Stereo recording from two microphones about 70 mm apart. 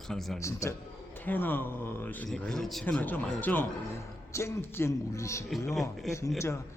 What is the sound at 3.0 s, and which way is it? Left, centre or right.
Speech, left.